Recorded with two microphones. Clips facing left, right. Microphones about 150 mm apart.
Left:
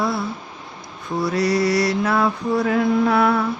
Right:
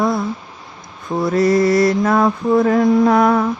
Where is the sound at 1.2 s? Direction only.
50° right (ahead or behind).